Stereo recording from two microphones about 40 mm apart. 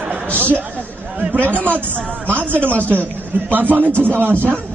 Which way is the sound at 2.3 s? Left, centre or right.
Right.